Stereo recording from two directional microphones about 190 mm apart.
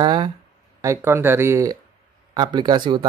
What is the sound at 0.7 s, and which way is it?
Speech, 15° right (ahead or behind).